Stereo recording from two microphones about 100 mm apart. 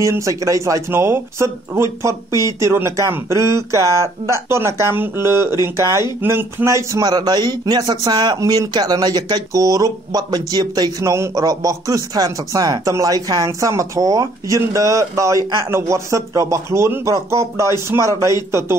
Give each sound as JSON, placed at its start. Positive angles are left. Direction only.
{"t": 0.0, "sound": "speech", "side_deg": -30}